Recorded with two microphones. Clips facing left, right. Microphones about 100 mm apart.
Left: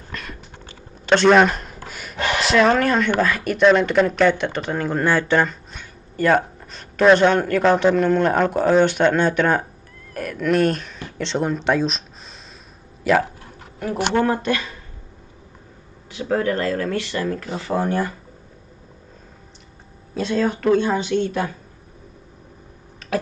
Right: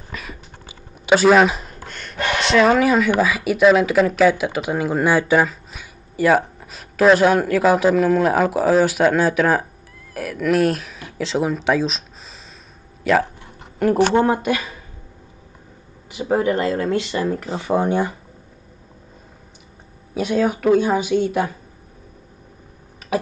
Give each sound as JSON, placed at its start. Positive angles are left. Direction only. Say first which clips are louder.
{"t": 0.1, "sound": "typing", "louder": "even", "side_deg": -5}
{"t": 2.4, "sound": "speech", "louder": "right 2 dB", "side_deg": 0}
{"t": 13.0, "sound": "speech", "louder": "right 1 dB", "side_deg": 0}
{"t": 14.1, "sound": "speech", "louder": "right 2 dB", "side_deg": -20}
{"t": 14.4, "sound": "speech", "louder": "right 1 dB", "side_deg": -10}
{"t": 16.1, "sound": "speech", "louder": "right 2 dB", "side_deg": -15}
{"t": 20.2, "sound": "speech", "louder": "right 2 dB", "side_deg": -10}